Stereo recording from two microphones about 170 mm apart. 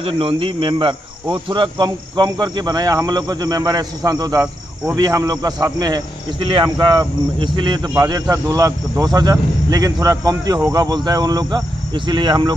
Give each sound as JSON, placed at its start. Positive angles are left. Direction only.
{"t": 0.0, "sound": "speech", "side_deg": -30}